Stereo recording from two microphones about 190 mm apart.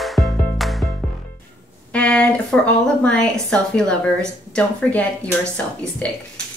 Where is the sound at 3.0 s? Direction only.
5° left (ahead or behind).